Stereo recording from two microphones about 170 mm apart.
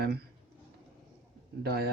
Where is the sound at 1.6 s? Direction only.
65° right (ahead or behind).